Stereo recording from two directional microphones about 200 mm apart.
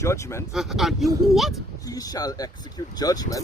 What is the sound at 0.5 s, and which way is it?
Speech, centre (ahead or behind).